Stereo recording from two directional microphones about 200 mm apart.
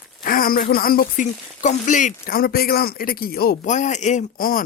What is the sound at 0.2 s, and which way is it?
Speech, 45° left (ahead or behind).